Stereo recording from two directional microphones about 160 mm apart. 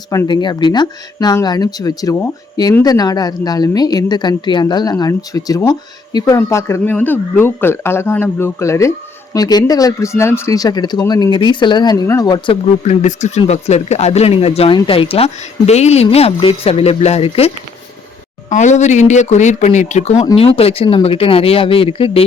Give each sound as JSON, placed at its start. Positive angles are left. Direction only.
{"t": 0.1, "sound": "speech", "side_deg": 25}
{"t": 12.8, "sound": "speech", "side_deg": 45}
{"t": 18.4, "sound": "speech", "side_deg": 50}